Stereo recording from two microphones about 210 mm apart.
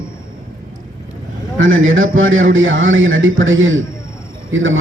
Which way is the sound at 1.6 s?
70° right (ahead or behind).